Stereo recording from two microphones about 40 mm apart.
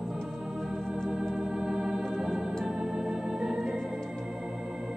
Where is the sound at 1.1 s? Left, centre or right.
Centre.